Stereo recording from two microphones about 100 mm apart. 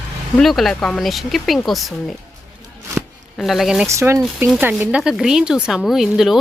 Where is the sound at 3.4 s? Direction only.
Centre (ahead or behind).